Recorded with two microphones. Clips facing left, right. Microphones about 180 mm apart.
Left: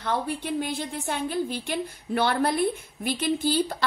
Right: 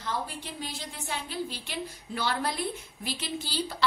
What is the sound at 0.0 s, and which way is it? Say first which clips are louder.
A woman's voice: left 6 dB; 60° left (ahead or behind).